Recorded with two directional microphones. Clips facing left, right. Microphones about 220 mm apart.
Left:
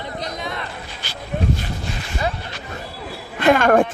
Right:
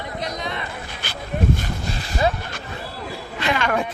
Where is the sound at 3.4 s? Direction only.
50° left (ahead or behind).